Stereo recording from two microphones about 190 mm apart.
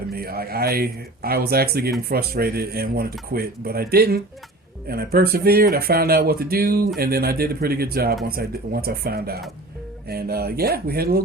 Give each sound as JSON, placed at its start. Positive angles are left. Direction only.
{"t": 0.1, "sound": "speech", "side_deg": -55}